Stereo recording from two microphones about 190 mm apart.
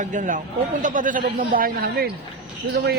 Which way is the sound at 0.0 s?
40° right (ahead or behind).